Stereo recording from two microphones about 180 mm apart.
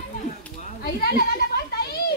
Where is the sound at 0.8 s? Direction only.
60° left (ahead or behind).